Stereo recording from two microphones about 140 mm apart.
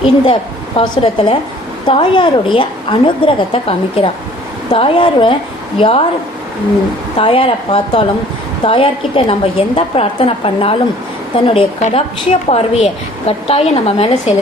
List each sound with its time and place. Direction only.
0.8 s a woman's voice: 35° left (ahead or behind)
7.2 s a woman's voice: 40° left (ahead or behind)